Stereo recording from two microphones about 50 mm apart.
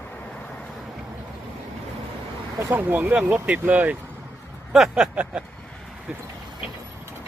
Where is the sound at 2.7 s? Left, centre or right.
Right.